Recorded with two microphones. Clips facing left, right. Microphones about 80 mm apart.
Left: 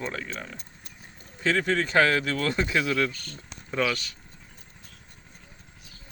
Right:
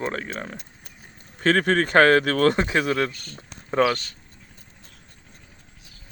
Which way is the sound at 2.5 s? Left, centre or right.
Right.